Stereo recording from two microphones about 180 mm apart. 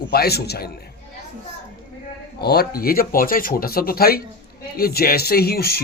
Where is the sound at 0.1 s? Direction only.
60° left (ahead or behind).